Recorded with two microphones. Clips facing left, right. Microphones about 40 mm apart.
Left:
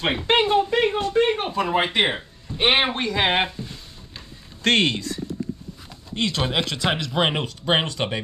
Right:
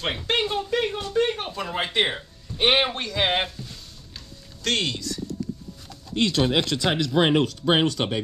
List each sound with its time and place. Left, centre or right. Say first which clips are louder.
0.0 s speech: left 5 dB; left
4.6 s speech: left 6 dB; left
6.1 s speech: right 2 dB; left